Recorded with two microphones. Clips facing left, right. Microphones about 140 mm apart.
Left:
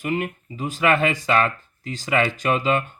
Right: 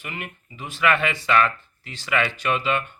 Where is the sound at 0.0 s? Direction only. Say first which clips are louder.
Left 10 dB; 40° left (ahead or behind).